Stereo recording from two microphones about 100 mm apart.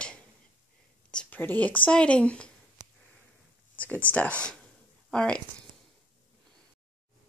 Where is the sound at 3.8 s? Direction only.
15° left (ahead or behind).